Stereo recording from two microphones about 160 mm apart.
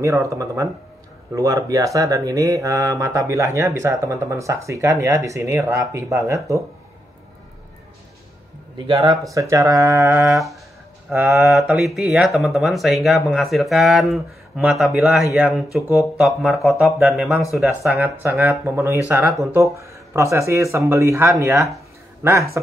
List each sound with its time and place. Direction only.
0.0 s speech: 20° right (ahead or behind)
8.7 s speech: 25° right (ahead or behind)
10.2 s speech: centre (ahead or behind)
11.1 s speech: 10° right (ahead or behind)
17.8 s speech: 15° right (ahead or behind)